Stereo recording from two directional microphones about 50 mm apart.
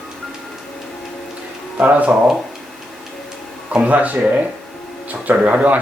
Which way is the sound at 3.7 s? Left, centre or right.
Right.